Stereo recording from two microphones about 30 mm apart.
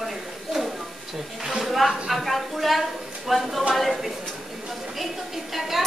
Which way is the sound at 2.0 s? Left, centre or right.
Centre.